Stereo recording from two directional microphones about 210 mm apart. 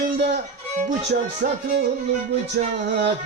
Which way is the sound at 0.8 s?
40° right (ahead or behind).